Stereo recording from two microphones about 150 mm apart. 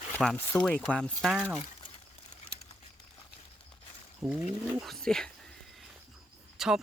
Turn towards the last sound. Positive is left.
turn(degrees=-5)  # may be behind; listen again after turning